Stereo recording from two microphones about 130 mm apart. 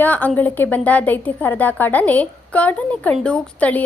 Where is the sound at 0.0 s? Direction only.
15° left (ahead or behind).